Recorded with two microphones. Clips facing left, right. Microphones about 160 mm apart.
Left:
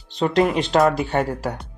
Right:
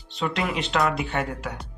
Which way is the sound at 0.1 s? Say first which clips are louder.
Left 8 dB; 35° left (ahead or behind).